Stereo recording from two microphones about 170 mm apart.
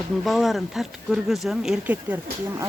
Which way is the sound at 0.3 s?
Centre (ahead or behind).